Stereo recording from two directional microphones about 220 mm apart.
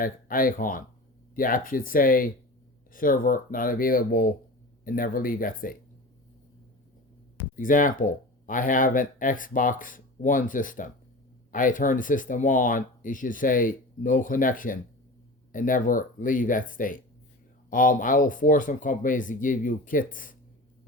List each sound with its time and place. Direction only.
0.0 s speech: 40° left (ahead or behind)
7.5 s speech: 35° left (ahead or behind)